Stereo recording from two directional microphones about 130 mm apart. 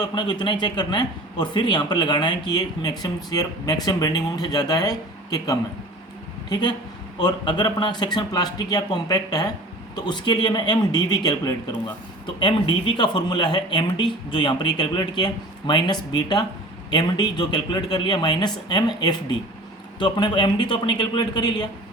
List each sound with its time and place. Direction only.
0.0 s a man's voice: 35° left (ahead or behind)